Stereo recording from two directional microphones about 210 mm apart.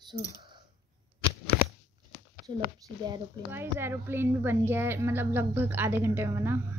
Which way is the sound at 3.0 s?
20° right (ahead or behind).